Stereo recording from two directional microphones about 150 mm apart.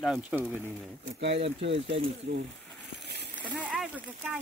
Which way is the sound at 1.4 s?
40° right (ahead or behind).